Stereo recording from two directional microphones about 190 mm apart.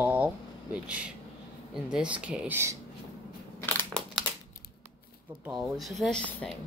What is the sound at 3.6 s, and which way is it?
Crushing, 5° left (ahead or behind).